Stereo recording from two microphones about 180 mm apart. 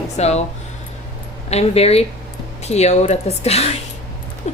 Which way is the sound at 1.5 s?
35° left (ahead or behind).